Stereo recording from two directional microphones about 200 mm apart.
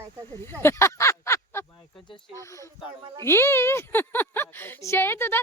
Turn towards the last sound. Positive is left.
turn(degrees=10)  # may be behind; listen again after turning